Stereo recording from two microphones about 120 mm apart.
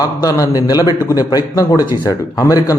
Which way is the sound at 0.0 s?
30° left (ahead or behind).